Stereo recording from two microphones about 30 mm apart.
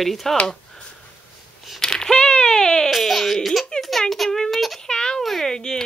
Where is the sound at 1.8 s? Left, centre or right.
Left.